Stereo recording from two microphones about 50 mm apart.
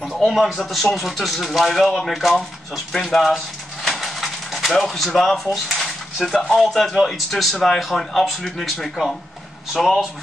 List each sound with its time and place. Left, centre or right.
0.0 s speech: centre